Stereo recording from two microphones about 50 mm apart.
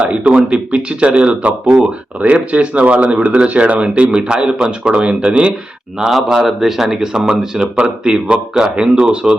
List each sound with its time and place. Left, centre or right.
0.0 s speech: right
6.0 s a man's voice: centre